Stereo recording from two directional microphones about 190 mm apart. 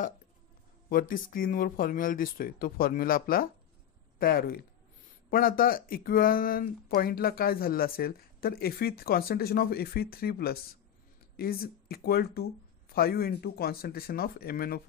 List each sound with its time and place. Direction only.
0.8 s speech: 50° left (ahead or behind)